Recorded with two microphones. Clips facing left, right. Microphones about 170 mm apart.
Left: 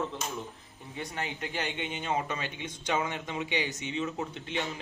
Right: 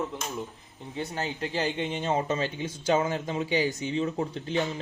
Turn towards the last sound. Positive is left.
turn(degrees=-35)  # may be behind; listen again after turning